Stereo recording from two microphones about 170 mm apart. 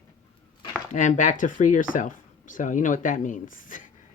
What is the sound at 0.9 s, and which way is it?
Speech, 50° left (ahead or behind).